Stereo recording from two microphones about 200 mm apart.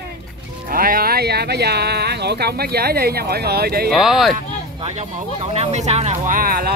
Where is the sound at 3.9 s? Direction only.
Centre (ahead or behind).